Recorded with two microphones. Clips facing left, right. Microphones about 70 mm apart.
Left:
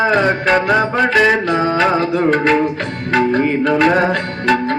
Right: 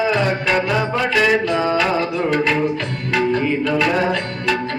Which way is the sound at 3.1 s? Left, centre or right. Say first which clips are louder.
Left 4 dB; left.